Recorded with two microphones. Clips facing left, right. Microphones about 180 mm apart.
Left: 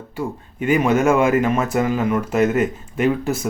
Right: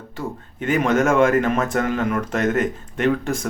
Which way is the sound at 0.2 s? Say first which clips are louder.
Left 3 dB; 10° left (ahead or behind).